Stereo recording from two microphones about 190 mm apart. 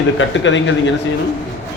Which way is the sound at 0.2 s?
75° left (ahead or behind).